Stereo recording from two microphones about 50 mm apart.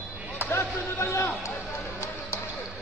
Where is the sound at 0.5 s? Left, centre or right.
Left.